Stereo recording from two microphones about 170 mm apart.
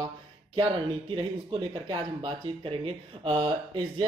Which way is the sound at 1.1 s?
30° right (ahead or behind).